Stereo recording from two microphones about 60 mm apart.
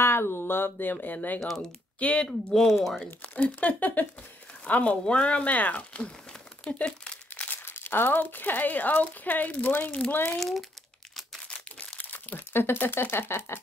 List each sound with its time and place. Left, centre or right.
0.0 s speech: left
1.6 s speech: centre
2.2 s speech: centre
3.5 s speech: left
6.6 s crumpling: centre
7.4 s speech: left
10.3 s speech: centre
11.4 s crumpling: centre
12.0 s speech: left